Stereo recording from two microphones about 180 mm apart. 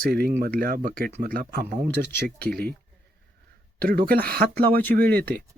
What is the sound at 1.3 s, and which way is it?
Speech, 65° right (ahead or behind).